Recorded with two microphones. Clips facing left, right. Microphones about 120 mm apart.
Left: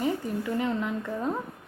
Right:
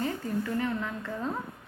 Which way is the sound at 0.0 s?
15° left (ahead or behind).